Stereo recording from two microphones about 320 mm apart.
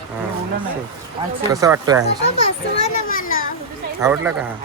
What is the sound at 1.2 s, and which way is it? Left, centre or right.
Speech, centre.